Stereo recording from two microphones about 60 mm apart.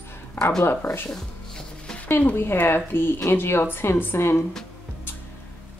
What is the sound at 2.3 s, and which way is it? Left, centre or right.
Speech, left.